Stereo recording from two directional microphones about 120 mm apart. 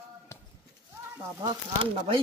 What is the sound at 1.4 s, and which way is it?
Speech, 40° right (ahead or behind).